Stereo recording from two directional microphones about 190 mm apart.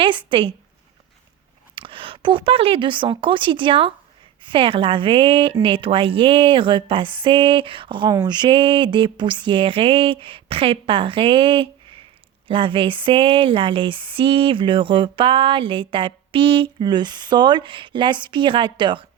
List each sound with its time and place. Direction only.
0.0 s speech: 25° right (ahead or behind)
1.7 s speech: 25° right (ahead or behind)